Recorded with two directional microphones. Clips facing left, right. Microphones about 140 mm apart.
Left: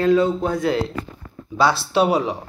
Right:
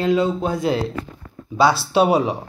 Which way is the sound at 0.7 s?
20° right (ahead or behind).